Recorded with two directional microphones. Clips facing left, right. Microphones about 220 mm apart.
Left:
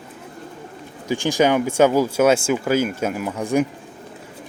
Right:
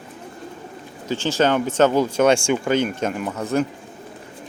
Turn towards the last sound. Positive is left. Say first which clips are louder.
# left 2 dB
turn(degrees=10)  # may be behind; listen again after turning